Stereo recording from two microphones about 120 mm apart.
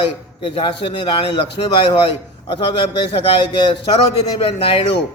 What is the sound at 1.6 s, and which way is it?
Speech, 65° left (ahead or behind).